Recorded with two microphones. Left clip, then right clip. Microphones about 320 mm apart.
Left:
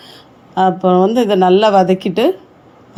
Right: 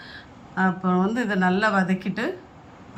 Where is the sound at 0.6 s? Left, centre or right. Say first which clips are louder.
Left 12 dB; left.